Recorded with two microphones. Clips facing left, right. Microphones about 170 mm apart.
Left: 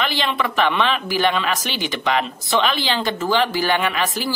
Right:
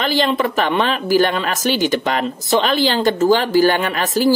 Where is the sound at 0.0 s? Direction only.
40° right (ahead or behind).